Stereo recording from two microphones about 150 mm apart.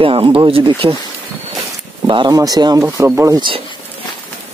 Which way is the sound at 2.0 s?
30° right (ahead or behind).